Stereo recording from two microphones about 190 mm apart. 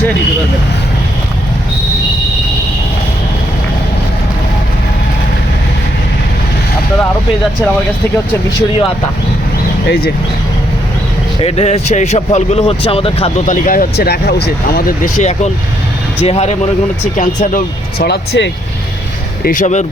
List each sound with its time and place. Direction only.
9.8 s speech: 55° left (ahead or behind)
11.3 s speech: 30° left (ahead or behind); by 14.8 s 60° left (ahead or behind)
15.0 s speech: 40° left (ahead or behind)
18.0 s speech: 65° left (ahead or behind)
19.5 s speech: 40° left (ahead or behind)